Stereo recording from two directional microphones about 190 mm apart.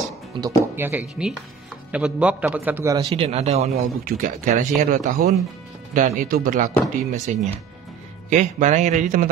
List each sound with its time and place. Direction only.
0.4 s a man's voice: 10° right (ahead or behind)
3.1 s a man's voice: 30° right (ahead or behind)
3.7 s a man's voice: 55° right (ahead or behind)